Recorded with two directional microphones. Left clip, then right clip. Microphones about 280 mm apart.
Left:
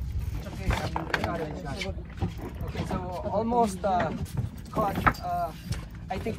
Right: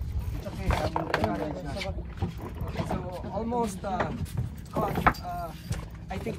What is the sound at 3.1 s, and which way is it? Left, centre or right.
Speech, centre.